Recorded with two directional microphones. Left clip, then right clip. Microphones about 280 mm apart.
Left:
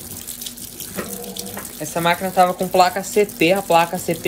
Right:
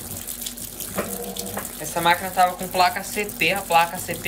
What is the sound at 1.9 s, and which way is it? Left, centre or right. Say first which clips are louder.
Speech: left 1 dB; centre.